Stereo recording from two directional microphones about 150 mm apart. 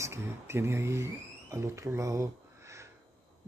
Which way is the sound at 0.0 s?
15° right (ahead or behind).